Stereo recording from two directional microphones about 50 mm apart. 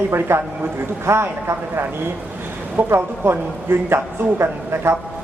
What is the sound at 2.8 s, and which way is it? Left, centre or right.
A man's voice, right.